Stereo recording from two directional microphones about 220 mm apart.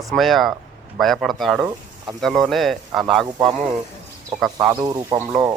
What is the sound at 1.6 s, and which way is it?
Speech, 15° right (ahead or behind).